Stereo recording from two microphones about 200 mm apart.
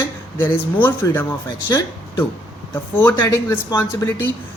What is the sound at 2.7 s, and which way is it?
Speech, 10° left (ahead or behind).